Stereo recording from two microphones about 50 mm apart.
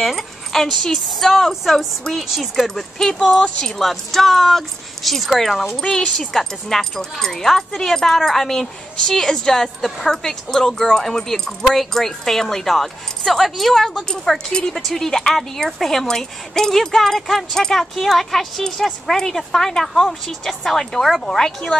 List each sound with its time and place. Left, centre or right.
0.0 s speech: centre
3.3 s speech: centre
3.7 s speech: centre
14.0 s speech: centre